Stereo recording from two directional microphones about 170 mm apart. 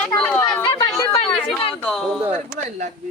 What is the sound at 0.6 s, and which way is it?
Speech, 30° left (ahead or behind).